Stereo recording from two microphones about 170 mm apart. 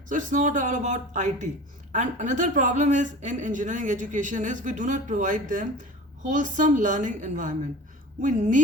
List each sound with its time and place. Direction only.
0.1 s speech: 50° right (ahead or behind)